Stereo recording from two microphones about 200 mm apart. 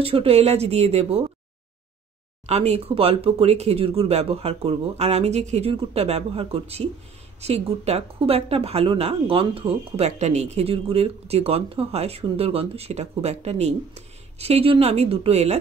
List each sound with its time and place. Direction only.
0.0 s speech: 30° right (ahead or behind)
2.4 s speech: 35° right (ahead or behind)